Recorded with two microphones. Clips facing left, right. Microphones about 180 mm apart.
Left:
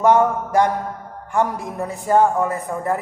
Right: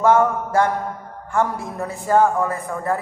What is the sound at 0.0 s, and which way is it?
A man's voice, 15° left (ahead or behind).